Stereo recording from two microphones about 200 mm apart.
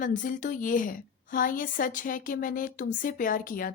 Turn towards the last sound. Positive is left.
turn(degrees=45)  # may be behind; listen again after turning